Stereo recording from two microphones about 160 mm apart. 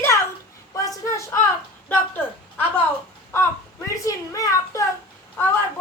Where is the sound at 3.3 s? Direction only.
15° left (ahead or behind).